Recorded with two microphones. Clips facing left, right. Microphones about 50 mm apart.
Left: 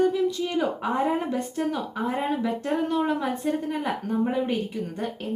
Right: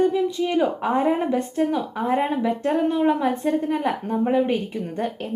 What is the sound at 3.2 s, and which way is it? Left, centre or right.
A woman's voice, right.